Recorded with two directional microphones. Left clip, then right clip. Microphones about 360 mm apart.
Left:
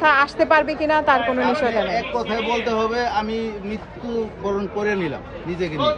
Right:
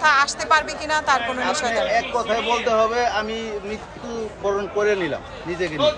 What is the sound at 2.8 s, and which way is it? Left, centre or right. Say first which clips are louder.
Speech: right 1 dB; centre.